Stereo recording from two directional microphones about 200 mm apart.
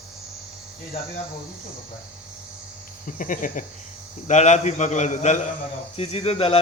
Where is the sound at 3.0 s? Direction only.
40° left (ahead or behind).